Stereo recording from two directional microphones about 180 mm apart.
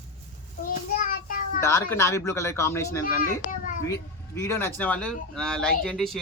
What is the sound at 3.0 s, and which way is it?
Speech, 50° left (ahead or behind).